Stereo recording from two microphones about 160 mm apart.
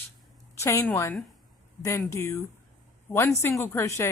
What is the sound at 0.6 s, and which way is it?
A woman's voice, 15° left (ahead or behind).